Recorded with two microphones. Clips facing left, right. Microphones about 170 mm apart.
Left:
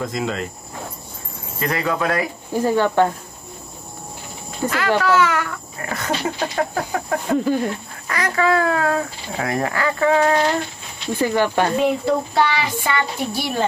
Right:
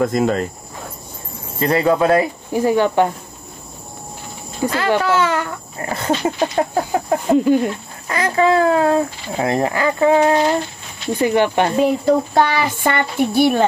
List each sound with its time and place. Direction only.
0.0 s a child's voice: 45° right (ahead or behind)
1.6 s speech: 30° right (ahead or behind)
2.5 s speech: 15° right (ahead or behind)
4.6 s speech: 25° right (ahead or behind)
11.8 s a child's voice: 45° right (ahead or behind)